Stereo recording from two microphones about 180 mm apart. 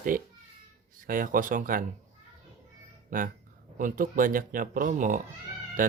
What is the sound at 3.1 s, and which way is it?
Speech, 50° right (ahead or behind).